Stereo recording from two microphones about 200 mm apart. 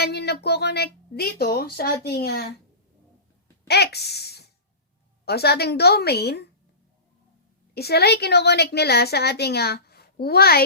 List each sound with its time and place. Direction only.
0.0 s a woman's voice: 55° left (ahead or behind)
3.7 s a woman's voice: 55° left (ahead or behind)
7.7 s a woman's voice: 55° left (ahead or behind)